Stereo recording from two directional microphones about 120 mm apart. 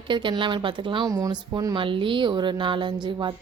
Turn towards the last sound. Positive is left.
turn(degrees=-40)  # may be behind; listen again after turning